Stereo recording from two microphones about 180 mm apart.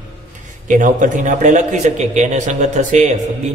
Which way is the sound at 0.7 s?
45° right (ahead or behind).